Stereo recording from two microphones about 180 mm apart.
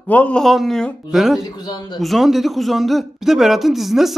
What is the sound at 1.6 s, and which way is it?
Speech, 25° left (ahead or behind).